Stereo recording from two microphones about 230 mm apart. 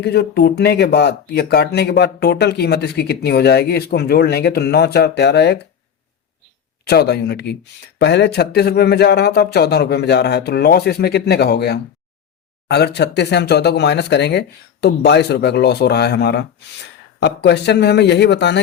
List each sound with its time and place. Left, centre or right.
0.0 s speech: left
6.8 s speech: left